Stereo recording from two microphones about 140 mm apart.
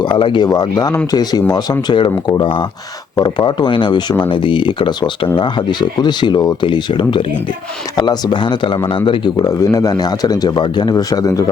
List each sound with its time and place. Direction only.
0.0 s a man's voice: 35° left (ahead or behind)